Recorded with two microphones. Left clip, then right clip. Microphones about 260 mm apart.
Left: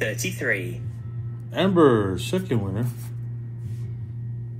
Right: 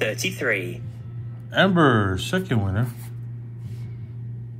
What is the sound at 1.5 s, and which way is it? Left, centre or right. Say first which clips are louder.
Speech: even; right.